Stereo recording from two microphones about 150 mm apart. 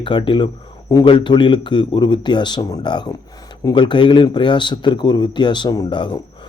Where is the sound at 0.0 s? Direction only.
35° left (ahead or behind).